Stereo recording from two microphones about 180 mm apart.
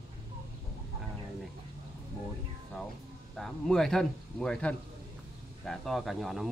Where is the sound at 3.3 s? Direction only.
Centre (ahead or behind).